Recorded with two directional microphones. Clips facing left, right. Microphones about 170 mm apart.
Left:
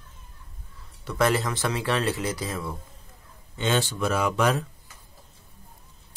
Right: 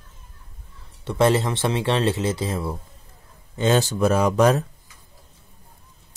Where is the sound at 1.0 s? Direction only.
25° right (ahead or behind).